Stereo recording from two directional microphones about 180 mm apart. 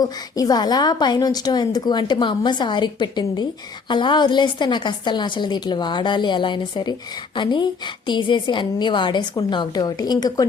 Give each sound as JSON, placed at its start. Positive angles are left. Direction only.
{"t": 0.0, "sound": "a woman's voice", "side_deg": 20}